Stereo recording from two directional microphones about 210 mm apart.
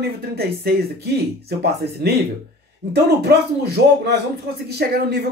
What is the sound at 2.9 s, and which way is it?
Speech, 50° right (ahead or behind).